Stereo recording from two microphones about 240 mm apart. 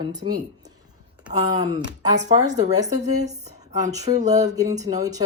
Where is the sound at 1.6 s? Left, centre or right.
Centre.